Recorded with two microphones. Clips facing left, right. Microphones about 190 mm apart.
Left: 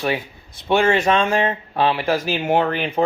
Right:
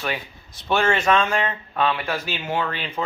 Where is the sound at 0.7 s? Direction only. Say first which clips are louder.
Left 3 dB; 20° left (ahead or behind).